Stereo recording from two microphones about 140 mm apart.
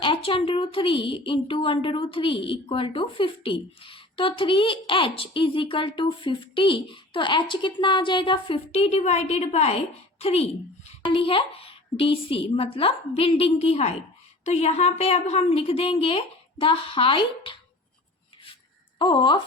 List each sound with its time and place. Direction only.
0.0 s a woman's voice: 40° left (ahead or behind)
18.9 s a woman's voice: 35° left (ahead or behind)